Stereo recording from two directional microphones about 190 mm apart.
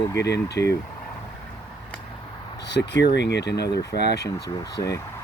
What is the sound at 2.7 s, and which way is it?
Speech, 65° left (ahead or behind).